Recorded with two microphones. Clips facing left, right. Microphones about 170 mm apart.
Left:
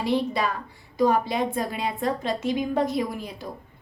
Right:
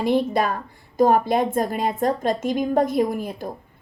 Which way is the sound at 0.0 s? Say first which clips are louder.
Right 4 dB; 50° right (ahead or behind).